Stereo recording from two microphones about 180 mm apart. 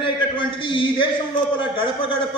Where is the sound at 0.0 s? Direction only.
30° left (ahead or behind).